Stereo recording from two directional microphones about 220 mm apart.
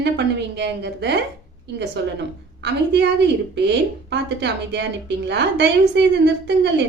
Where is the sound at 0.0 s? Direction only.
50° right (ahead or behind).